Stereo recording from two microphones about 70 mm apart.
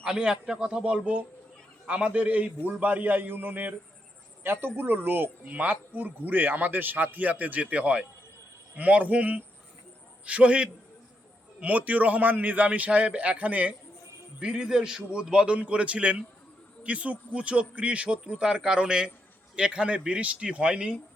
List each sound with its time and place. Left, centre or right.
0.0 s a man's voice: centre